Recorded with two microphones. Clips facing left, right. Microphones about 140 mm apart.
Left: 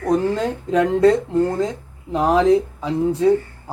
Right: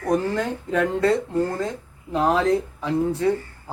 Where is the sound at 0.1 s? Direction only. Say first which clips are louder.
Left 3 dB; 20° left (ahead or behind).